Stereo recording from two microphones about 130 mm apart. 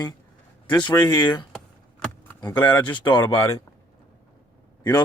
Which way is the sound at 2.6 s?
15° left (ahead or behind).